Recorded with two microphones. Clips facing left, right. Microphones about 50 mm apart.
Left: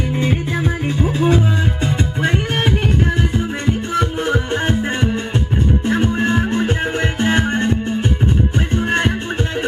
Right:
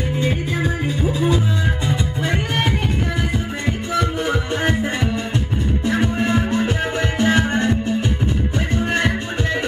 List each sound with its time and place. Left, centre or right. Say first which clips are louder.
0.8 s music: left 4 dB; left
3.9 s music: left 1 dB; left
5.9 s music: even; left